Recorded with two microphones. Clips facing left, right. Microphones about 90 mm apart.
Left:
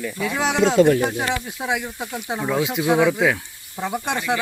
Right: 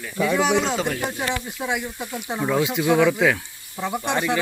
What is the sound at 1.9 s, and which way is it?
Speech, 10° left (ahead or behind).